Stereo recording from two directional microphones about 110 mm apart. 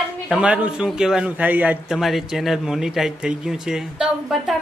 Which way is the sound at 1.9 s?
Centre (ahead or behind).